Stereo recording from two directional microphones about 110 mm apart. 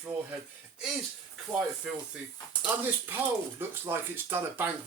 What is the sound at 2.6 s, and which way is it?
Speech, 15° right (ahead or behind).